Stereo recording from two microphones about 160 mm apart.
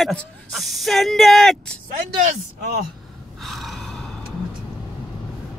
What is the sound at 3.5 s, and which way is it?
Gasp, centre (ahead or behind).